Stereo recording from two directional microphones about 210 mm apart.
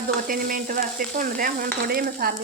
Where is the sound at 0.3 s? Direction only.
40° right (ahead or behind).